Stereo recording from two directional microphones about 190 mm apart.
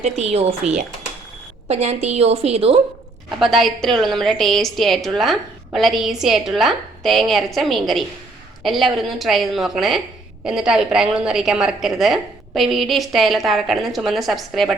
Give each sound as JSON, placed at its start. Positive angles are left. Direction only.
{"t": 0.0, "sound": "a woman's voice", "side_deg": -35}
{"t": 3.3, "sound": "a woman's voice", "side_deg": 0}